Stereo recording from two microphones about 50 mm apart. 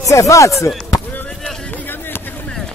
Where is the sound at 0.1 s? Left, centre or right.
Left.